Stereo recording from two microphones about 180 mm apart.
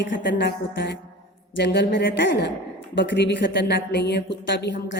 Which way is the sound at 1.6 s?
75° left (ahead or behind).